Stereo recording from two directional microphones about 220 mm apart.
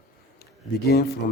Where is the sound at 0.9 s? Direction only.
45° left (ahead or behind).